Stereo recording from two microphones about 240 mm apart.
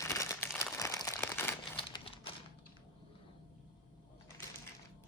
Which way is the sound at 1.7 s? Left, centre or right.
Left.